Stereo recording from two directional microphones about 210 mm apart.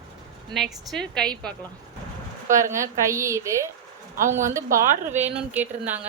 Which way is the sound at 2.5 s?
15° right (ahead or behind).